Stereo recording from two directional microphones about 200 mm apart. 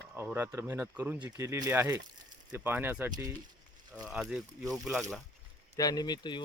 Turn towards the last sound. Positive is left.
turn(degrees=20)  # may be behind; listen again after turning